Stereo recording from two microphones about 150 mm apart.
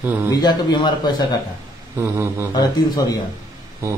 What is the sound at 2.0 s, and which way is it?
Mantra, 15° right (ahead or behind).